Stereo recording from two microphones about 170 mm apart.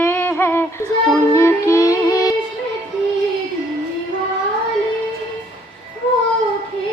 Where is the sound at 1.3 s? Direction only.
15° left (ahead or behind).